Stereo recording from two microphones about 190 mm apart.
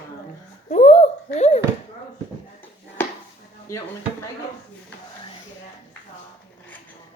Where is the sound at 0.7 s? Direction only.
35° left (ahead or behind).